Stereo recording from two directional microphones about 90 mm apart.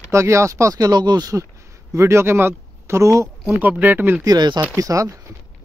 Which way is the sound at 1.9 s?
30° right (ahead or behind).